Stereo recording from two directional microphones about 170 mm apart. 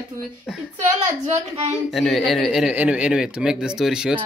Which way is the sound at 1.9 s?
Centre (ahead or behind).